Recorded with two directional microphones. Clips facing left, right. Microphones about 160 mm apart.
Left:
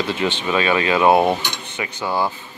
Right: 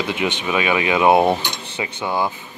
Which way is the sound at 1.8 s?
20° right (ahead or behind).